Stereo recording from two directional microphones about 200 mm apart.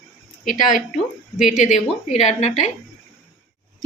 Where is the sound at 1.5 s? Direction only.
35° left (ahead or behind).